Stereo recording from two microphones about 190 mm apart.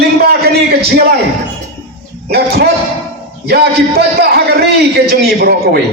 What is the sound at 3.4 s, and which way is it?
Speech, 55° right (ahead or behind).